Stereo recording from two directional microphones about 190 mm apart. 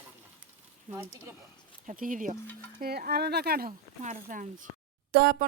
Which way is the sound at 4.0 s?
45° right (ahead or behind).